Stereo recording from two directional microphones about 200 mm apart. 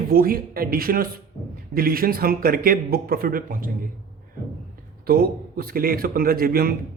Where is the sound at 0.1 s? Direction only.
45° right (ahead or behind).